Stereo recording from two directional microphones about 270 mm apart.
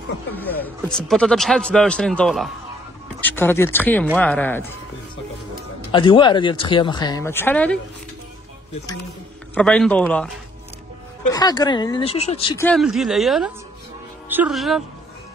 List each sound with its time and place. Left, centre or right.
0.3 s a man's voice: centre
5.9 s speech: centre
9.6 s a man's voice: centre
11.3 s speech: centre
12.5 s a man's voice: centre